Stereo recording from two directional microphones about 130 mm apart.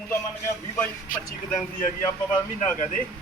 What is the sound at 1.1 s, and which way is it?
Speech, 90° left.